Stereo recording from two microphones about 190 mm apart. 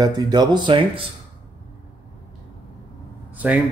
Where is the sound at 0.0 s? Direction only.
20° right (ahead or behind).